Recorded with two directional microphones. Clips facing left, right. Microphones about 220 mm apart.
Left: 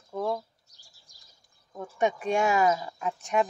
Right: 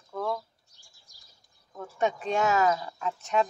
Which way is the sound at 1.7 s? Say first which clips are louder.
Left 1 dB; 15° left (ahead or behind).